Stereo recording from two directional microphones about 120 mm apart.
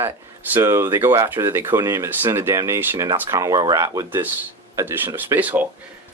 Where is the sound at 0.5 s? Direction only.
20° right (ahead or behind).